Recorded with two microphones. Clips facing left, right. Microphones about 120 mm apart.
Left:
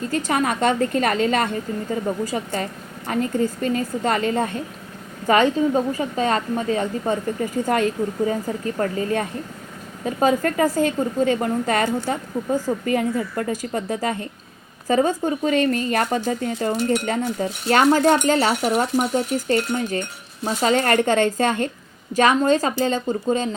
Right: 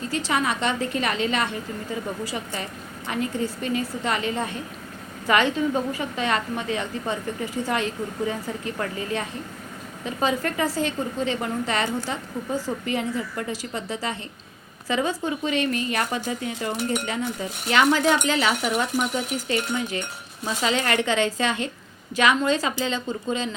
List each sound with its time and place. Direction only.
0.1 s a woman's voice: 45° left (ahead or behind)